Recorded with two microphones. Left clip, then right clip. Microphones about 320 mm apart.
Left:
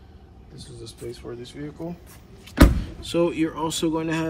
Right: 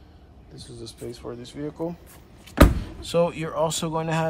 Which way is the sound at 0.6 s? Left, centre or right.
Centre.